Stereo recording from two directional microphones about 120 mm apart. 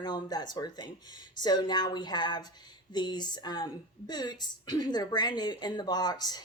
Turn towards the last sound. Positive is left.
turn(degrees=35)  # may be behind; listen again after turning